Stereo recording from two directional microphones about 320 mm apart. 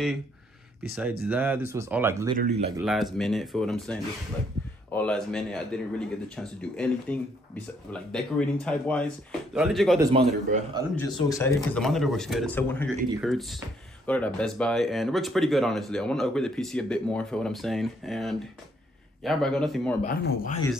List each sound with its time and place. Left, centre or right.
1.3 s speech: centre
2.3 s speech: right
2.8 s a man's voice: centre
9.9 s speech: centre
11.0 s a man's voice: centre
20.0 s speech: left